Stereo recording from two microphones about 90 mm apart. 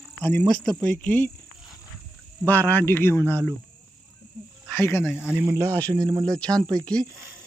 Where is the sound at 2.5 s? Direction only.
20° left (ahead or behind).